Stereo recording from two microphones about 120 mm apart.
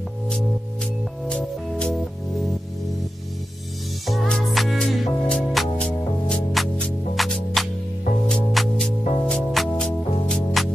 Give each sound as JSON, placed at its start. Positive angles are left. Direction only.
{"t": 1.2, "sound": "music", "side_deg": 10}
{"t": 4.1, "sound": "music", "side_deg": 0}